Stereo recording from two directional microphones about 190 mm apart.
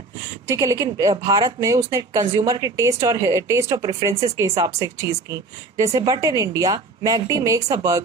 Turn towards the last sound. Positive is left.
turn(degrees=-15)  # may be behind; listen again after turning